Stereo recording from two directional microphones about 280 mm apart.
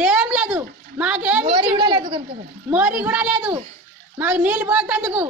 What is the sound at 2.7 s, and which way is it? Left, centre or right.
A woman's voice, centre.